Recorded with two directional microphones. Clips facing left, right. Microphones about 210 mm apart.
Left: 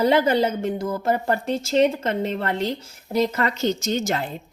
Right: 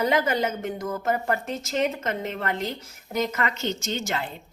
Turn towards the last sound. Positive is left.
turn(degrees=40)  # may be behind; listen again after turning